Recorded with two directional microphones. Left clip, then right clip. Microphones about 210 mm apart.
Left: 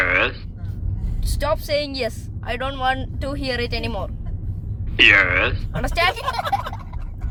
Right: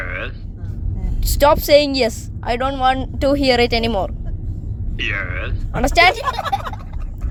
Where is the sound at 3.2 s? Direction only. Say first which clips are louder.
Right 11 dB; 35° right (ahead or behind).